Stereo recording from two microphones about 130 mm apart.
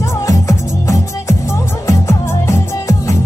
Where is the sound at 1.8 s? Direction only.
25° left (ahead or behind).